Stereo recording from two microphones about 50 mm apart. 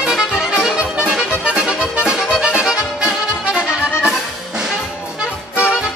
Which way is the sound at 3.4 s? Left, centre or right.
Centre.